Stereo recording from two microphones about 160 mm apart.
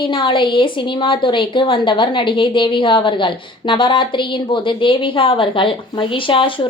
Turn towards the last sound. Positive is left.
turn(degrees=30)  # may be behind; listen again after turning